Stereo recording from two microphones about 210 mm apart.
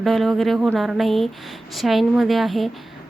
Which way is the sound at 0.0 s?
Centre (ahead or behind).